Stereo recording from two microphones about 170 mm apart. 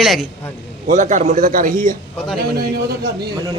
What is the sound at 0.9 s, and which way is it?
A man's voice, 45° right (ahead or behind).